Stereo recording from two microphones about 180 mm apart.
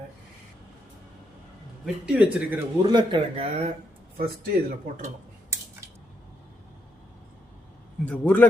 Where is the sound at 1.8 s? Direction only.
5° right (ahead or behind).